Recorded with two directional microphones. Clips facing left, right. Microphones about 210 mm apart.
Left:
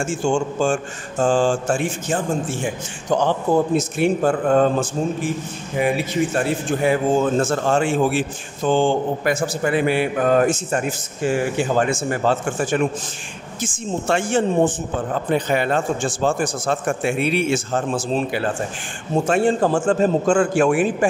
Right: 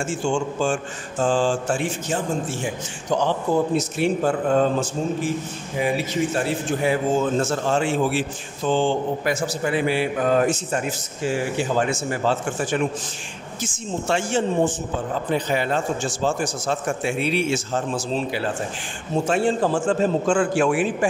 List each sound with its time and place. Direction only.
0.0 s a man's voice: 45° left (ahead or behind)
6.3 s a man's voice: 55° left (ahead or behind)